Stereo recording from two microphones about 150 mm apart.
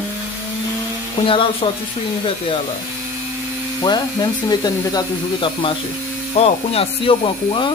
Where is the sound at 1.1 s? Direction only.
35° left (ahead or behind).